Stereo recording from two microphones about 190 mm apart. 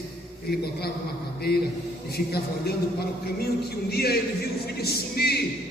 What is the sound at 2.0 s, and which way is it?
Speech, 55° left (ahead or behind).